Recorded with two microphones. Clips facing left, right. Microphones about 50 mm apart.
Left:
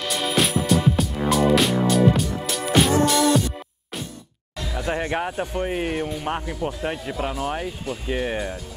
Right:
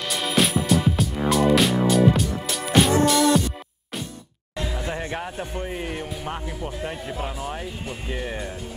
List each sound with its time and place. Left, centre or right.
0.0 s music: centre
4.8 s speech: left
7.3 s speech: left
8.1 s speech: left